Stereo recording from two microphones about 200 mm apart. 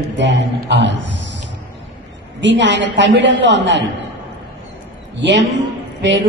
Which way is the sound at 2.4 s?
65° right (ahead or behind).